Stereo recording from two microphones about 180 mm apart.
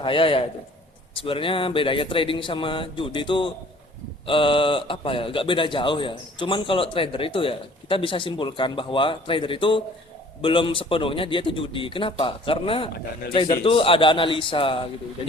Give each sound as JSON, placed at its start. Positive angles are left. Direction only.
{"t": 0.0, "sound": "speech", "side_deg": 30}